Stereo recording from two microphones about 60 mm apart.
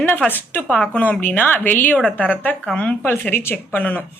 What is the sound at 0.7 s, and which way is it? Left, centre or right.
A woman's voice, left.